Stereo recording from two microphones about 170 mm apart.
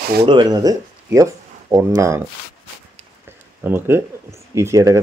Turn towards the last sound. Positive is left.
turn(degrees=-15)  # may be behind; listen again after turning